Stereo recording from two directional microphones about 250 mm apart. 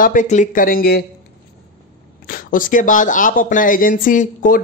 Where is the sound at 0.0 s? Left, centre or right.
Left.